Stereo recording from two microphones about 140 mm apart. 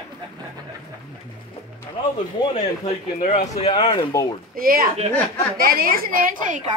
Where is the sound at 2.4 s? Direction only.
40° left (ahead or behind).